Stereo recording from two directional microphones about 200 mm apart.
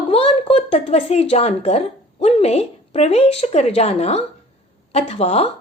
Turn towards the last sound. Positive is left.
turn(degrees=30)  # may be behind; listen again after turning